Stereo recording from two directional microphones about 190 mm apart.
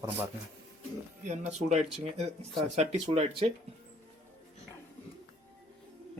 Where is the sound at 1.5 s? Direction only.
35° right (ahead or behind).